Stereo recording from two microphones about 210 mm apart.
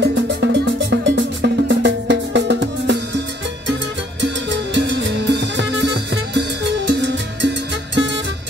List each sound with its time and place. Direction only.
0.0 s music: 55° right (ahead or behind)
4.7 s music: 55° right (ahead or behind)